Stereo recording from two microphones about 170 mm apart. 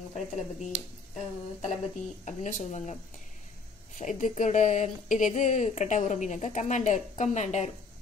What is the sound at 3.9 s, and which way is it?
A woman's voice, 45° left (ahead or behind).